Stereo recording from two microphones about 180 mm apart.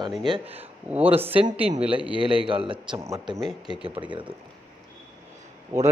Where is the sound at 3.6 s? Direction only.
30° right (ahead or behind).